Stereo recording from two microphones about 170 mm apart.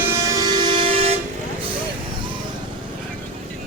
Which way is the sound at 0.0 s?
20° right (ahead or behind).